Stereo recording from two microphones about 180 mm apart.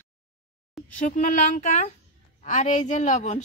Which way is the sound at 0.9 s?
45° left (ahead or behind).